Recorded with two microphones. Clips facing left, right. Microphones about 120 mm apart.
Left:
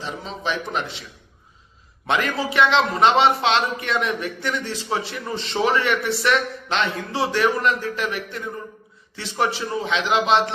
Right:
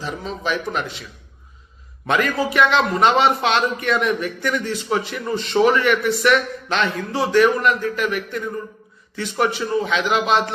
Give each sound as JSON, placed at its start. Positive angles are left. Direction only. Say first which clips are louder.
{"t": 0.0, "sound": "a man's voice", "louder": "right 2 dB", "side_deg": 25}
{"t": 2.0, "sound": "a man's voice", "louder": "right 3 dB", "side_deg": 25}